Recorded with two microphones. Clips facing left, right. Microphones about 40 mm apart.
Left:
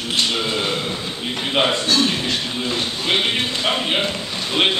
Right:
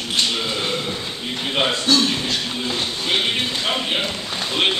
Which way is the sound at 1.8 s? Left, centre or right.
Left.